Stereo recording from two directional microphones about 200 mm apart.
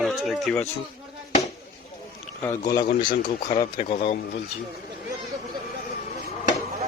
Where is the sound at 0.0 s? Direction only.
Centre (ahead or behind).